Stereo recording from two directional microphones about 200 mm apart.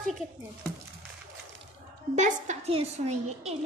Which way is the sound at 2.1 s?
35° right (ahead or behind).